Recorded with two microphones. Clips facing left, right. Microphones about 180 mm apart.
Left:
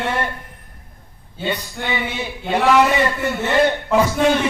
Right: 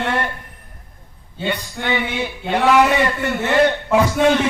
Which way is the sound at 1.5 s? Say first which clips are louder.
Right 1 dB; 10° left (ahead or behind).